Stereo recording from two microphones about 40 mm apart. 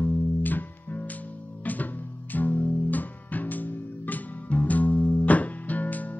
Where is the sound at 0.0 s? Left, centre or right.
Left.